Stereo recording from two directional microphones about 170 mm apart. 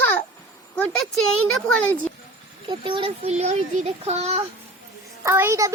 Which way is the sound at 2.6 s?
30° right (ahead or behind).